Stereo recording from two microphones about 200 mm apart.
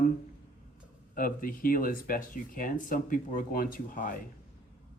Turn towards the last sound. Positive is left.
turn(degrees=45)  # may be behind; listen again after turning